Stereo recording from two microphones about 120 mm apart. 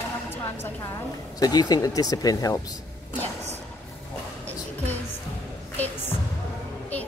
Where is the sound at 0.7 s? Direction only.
30° left (ahead or behind).